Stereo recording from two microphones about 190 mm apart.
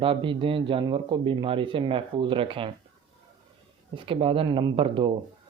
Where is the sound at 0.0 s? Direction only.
25° right (ahead or behind).